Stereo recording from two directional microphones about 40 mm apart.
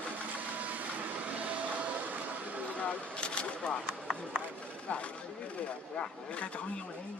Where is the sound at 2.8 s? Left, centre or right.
Left.